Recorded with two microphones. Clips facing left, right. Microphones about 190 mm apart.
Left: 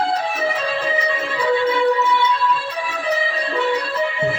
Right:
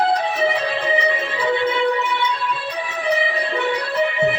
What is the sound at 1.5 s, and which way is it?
Music, 20° right (ahead or behind).